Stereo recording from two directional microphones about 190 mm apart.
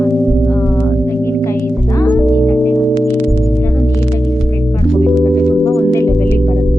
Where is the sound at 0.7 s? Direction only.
15° left (ahead or behind).